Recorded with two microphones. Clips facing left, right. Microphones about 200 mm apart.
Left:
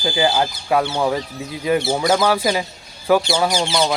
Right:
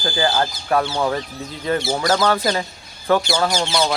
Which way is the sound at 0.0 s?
15° left (ahead or behind).